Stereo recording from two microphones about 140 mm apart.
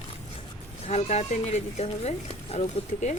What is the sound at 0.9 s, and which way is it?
Speech, 50° left (ahead or behind).